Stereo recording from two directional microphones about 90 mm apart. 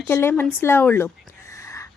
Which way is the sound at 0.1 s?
20° left (ahead or behind).